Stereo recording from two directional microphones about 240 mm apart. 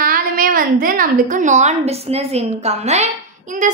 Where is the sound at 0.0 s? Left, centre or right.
Right.